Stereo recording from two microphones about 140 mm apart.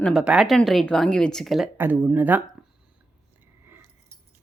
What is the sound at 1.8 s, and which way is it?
Speech, 15° right (ahead or behind).